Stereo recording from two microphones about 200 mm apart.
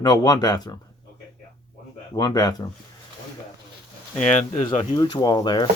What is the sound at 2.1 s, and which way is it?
Speech, 20° left (ahead or behind).